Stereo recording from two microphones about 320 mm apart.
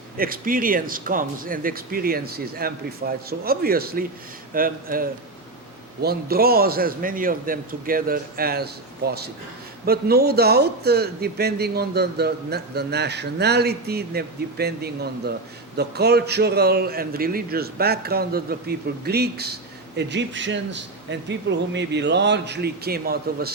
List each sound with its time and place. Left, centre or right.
0.2 s a man's voice: right